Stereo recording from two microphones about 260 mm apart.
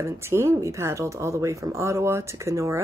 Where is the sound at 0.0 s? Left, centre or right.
Centre.